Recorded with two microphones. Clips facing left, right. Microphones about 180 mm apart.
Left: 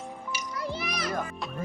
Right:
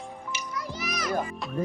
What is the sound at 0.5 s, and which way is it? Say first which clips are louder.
Children playing: left 2 dB; 30° left (ahead or behind).